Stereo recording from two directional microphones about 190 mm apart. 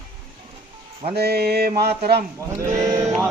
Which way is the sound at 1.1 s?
55° right (ahead or behind).